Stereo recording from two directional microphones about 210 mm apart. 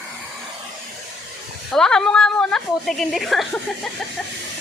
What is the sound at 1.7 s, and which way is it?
A woman's voice, 5° left (ahead or behind).